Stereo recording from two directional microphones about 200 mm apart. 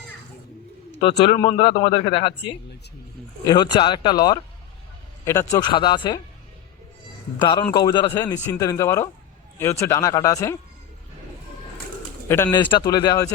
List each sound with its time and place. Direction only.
1.2 s speech: 25° left (ahead or behind)
7.4 s speech: 25° left (ahead or behind)
12.3 s speech: 15° left (ahead or behind)